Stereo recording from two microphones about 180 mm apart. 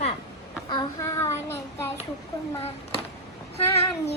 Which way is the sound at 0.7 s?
20° left (ahead or behind).